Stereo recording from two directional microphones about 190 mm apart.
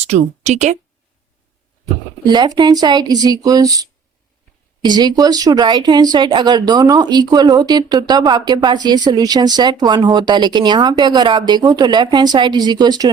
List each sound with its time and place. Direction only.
0.0 s speech: 35° right (ahead or behind)
2.2 s speech: 20° right (ahead or behind)